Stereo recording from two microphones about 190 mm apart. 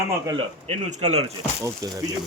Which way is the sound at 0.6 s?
35° right (ahead or behind).